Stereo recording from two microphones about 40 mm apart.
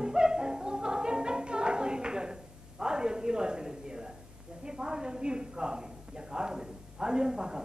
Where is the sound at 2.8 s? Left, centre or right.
Centre.